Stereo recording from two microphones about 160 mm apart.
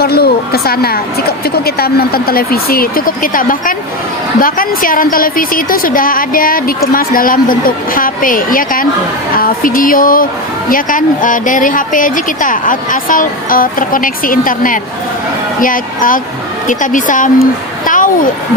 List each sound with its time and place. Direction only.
0.0 s a woman's voice: 75° left (ahead or behind); by 18.1 s 55° left (ahead or behind)